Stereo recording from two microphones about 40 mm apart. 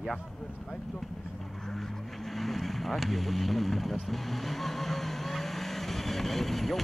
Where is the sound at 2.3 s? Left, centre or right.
Centre.